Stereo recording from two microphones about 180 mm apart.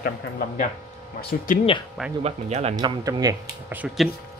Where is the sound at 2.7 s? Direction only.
20° right (ahead or behind); by 4.1 s 5° right (ahead or behind).